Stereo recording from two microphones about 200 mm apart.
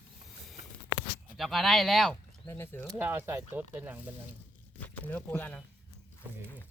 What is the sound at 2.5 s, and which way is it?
Speech, 10° left (ahead or behind).